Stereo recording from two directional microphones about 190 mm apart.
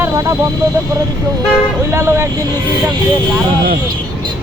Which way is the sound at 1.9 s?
15° right (ahead or behind).